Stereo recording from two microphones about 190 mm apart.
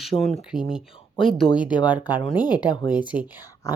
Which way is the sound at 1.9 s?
10° right (ahead or behind).